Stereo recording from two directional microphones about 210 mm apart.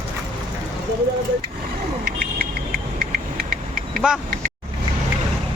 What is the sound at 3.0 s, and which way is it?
Vehicle, 40° right (ahead or behind).